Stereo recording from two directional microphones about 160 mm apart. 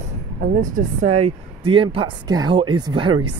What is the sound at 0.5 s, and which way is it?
Speech, 50° right (ahead or behind).